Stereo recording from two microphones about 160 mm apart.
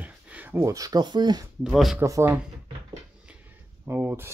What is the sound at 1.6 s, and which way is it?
Speech, centre (ahead or behind).